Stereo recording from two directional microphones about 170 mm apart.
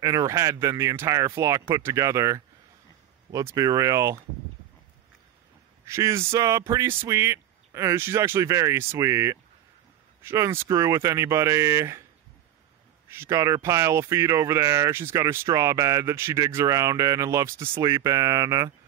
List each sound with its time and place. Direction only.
0.0 s speech: 20° right (ahead or behind)
5.9 s speech: 15° right (ahead or behind)
13.1 s speech: 15° right (ahead or behind)